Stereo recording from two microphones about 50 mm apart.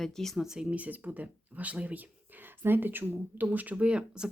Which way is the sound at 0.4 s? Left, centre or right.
Centre.